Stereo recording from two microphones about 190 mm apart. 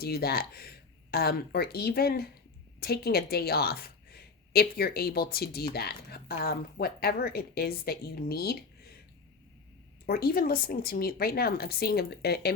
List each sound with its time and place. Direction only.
0.0 s a woman's voice: 55° left (ahead or behind)
10.1 s a woman's voice: 50° left (ahead or behind)